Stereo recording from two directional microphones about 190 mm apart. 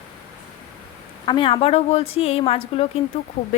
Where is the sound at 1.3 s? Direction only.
25° left (ahead or behind).